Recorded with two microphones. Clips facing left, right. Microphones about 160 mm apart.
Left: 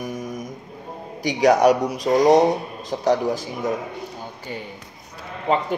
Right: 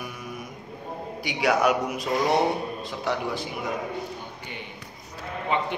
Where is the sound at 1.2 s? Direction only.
40° left (ahead or behind).